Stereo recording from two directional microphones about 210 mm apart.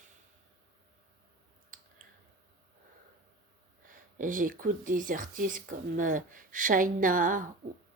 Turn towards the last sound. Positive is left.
turn(degrees=-40)  # may be behind; listen again after turning